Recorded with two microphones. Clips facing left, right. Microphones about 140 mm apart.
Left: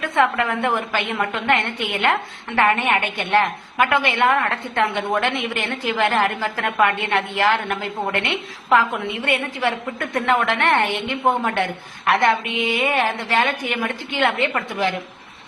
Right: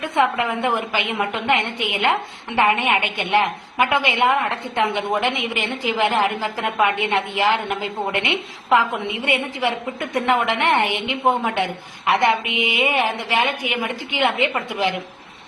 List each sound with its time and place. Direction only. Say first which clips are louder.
0.0 s a woman's voice: even; 15° right (ahead or behind)